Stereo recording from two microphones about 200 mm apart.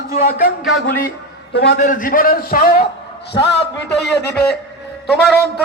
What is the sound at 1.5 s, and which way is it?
Speech, 55° left (ahead or behind).